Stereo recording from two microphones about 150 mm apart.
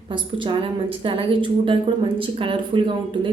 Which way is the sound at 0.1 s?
35° right (ahead or behind).